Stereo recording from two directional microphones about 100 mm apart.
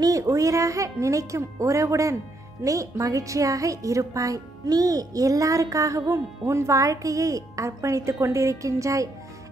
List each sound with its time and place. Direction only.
0.0 s speech: 35° right (ahead or behind)